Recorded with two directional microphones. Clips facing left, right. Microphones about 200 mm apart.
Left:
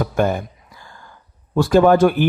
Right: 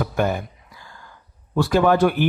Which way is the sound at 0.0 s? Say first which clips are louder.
Left 3 dB; 45° left (ahead or behind).